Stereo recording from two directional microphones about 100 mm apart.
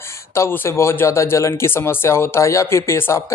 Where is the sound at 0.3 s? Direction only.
25° left (ahead or behind).